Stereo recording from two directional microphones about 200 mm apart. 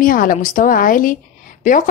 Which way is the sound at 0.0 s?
45° left (ahead or behind).